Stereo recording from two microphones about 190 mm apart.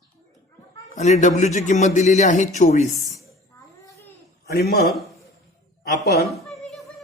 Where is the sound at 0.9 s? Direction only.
40° left (ahead or behind).